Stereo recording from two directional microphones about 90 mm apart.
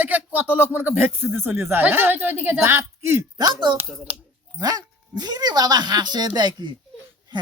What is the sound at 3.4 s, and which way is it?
Speech, 50° right (ahead or behind).